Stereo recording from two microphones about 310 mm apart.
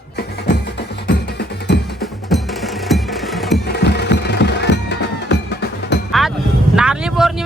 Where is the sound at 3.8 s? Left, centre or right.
Left.